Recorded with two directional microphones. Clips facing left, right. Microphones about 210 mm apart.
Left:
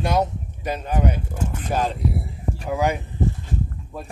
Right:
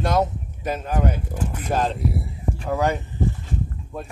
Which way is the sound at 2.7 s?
10° left (ahead or behind).